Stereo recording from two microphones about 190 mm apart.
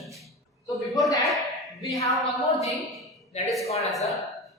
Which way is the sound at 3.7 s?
35° left (ahead or behind).